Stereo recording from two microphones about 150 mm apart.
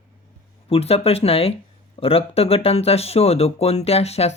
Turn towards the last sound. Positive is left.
turn(degrees=45)  # may be behind; listen again after turning